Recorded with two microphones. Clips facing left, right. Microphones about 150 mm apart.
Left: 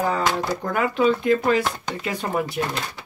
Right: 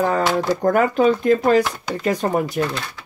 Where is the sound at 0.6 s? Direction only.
45° right (ahead or behind).